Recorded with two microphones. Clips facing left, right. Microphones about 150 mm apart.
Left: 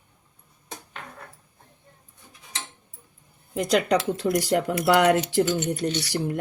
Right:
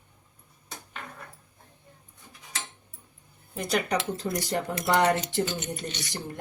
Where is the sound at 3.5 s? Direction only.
90° left.